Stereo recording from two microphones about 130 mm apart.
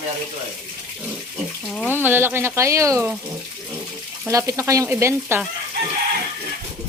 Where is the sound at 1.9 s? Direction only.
15° right (ahead or behind).